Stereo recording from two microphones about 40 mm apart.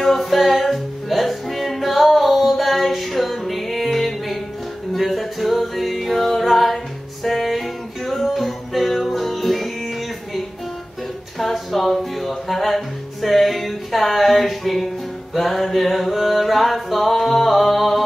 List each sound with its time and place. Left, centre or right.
0.0 s music: centre